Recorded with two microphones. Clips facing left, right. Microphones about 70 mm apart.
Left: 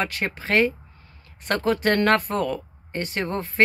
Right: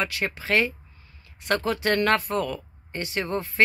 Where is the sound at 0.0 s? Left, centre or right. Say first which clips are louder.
Left 1 dB; left.